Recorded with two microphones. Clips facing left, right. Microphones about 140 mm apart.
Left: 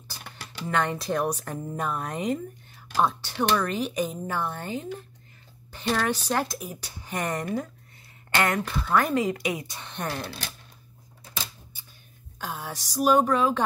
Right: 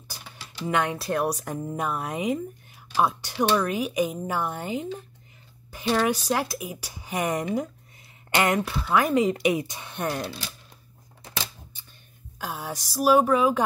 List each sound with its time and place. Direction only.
0.7 s speech: 10° right (ahead or behind)
9.2 s speech: 25° right (ahead or behind)
9.8 s speech: 5° right (ahead or behind)
11.2 s a sound: 90° right
11.7 s a sound: 10° left (ahead or behind)
12.4 s speech: 10° right (ahead or behind)